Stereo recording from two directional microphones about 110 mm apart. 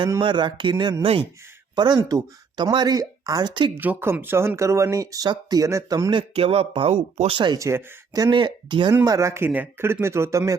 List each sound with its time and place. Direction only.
0.2 s speech: 45° right (ahead or behind)
2.0 s speech: 25° right (ahead or behind)
2.6 s speech: 40° right (ahead or behind)
3.8 s speech: 20° right (ahead or behind)
6.1 s speech: 55° right (ahead or behind)
7.6 s speech: 25° right (ahead or behind); by 8.9 s 45° right (ahead or behind)
9.0 s speech: 25° right (ahead or behind)